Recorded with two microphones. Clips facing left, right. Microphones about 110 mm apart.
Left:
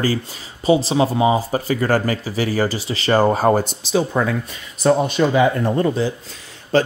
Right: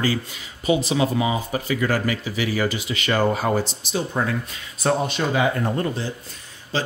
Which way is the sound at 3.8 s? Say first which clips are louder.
Left 7 dB; 90° left.